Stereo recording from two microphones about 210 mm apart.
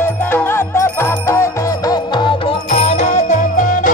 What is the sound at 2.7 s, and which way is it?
Music, 30° left (ahead or behind).